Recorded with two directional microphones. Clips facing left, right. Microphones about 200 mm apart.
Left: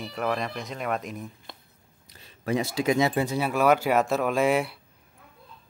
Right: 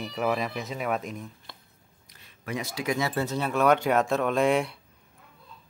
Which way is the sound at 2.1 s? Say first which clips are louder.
Left 7 dB; 30° left (ahead or behind).